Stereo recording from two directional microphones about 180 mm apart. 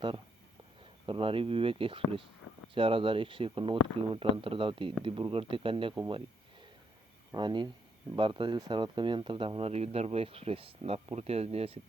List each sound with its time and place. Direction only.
1.0 s speech: 30° right (ahead or behind)
7.3 s speech: 25° right (ahead or behind)